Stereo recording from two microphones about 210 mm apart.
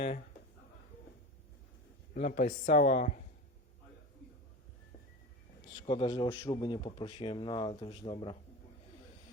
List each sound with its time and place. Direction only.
2.1 s speech: 35° left (ahead or behind)
5.7 s a man's voice: 25° left (ahead or behind)